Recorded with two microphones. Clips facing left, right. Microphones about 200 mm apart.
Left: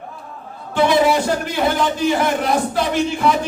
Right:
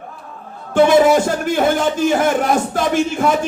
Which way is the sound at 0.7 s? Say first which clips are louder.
Right 4 dB; 50° right (ahead or behind).